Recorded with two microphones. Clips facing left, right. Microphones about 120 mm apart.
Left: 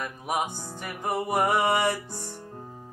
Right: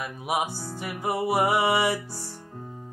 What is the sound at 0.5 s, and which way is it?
Music, 20° left (ahead or behind).